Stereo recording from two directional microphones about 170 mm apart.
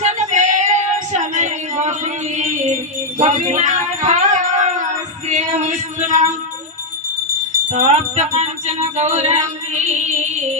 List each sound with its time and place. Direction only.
0.0 s female singing: 45° right (ahead or behind)
3.2 s music: 45° right (ahead or behind)
7.7 s music: 45° right (ahead or behind)